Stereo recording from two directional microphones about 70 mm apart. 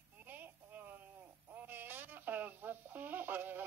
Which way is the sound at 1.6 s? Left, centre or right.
Right.